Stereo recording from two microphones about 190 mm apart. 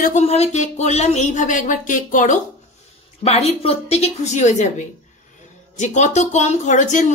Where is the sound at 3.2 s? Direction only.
35° left (ahead or behind).